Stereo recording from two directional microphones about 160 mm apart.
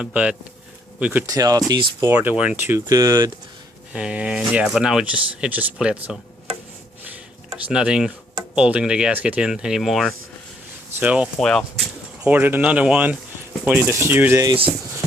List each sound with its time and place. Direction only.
0.0 s speech: 5° right (ahead or behind)
1.3 s speech: 20° right (ahead or behind)
2.0 s speech: 10° right (ahead or behind)
3.9 s speech: 10° right (ahead or behind)
7.5 s speech: 5° right (ahead or behind)
11.3 s speech: 5° left (ahead or behind)
12.2 s speech: 10° right (ahead or behind)
14.4 s speech: 35° right (ahead or behind)